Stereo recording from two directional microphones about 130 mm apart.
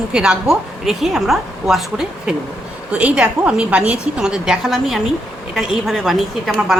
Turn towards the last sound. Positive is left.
turn(degrees=0)  # may be behind; listen again after turning